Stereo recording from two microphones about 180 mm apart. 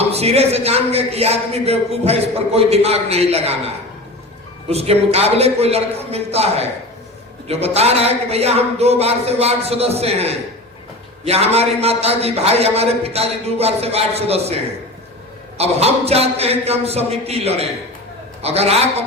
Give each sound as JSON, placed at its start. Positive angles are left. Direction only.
{"t": 0.0, "sound": "speech", "side_deg": -35}
{"t": 4.7, "sound": "speech", "side_deg": -35}
{"t": 15.5, "sound": "speech", "side_deg": -35}